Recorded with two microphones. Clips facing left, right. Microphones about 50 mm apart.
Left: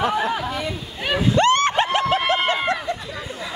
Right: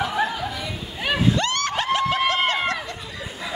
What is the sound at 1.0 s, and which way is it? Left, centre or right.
Splash, centre.